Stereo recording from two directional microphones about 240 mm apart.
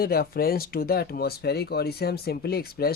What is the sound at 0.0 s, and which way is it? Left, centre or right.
Speech, left.